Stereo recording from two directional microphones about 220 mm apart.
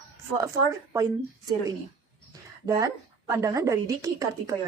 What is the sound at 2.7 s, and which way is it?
A woman's voice, 15° right (ahead or behind).